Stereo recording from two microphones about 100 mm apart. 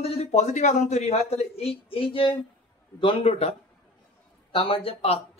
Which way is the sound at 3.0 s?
75° left (ahead or behind).